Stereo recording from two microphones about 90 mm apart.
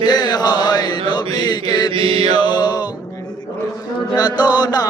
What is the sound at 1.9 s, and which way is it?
Mantra, 75° right (ahead or behind).